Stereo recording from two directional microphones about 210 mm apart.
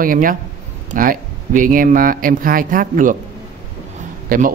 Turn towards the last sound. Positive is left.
turn(degrees=-40)  # may be behind; listen again after turning